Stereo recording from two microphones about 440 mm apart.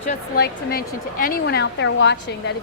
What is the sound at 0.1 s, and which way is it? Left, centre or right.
A woman's voice, left.